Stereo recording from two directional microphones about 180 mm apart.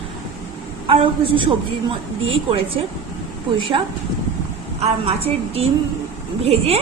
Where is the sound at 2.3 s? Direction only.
30° right (ahead or behind).